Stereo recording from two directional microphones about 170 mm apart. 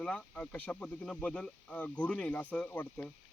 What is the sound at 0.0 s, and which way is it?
Speech, 5° left (ahead or behind).